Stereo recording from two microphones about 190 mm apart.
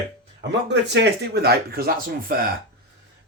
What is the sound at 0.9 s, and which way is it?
Speech, 60° right (ahead or behind).